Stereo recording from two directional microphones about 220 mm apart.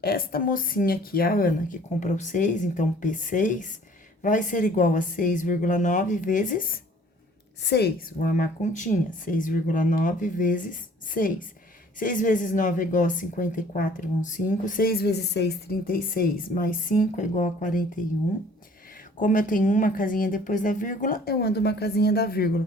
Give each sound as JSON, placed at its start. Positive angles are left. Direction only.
{"t": 0.0, "sound": "speech", "side_deg": 40}
{"t": 7.6, "sound": "speech", "side_deg": 50}
{"t": 19.1, "sound": "speech", "side_deg": 35}